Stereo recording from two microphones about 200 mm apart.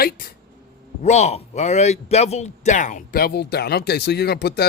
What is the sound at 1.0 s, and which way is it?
Speech, 35° left (ahead or behind).